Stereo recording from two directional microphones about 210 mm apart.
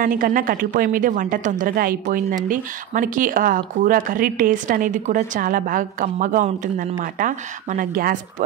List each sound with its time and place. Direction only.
0.0 s speech: 40° right (ahead or behind)